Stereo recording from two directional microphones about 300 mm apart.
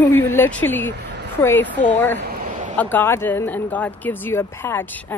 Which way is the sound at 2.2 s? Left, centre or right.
Right.